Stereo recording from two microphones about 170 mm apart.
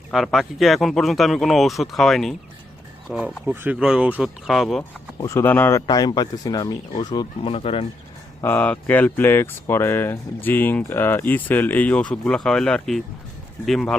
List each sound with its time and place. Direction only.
0.1 s speech: centre (ahead or behind)
4.8 s speech: 20° left (ahead or behind)
5.8 s speech: 25° left (ahead or behind)
8.4 s speech: 10° left (ahead or behind)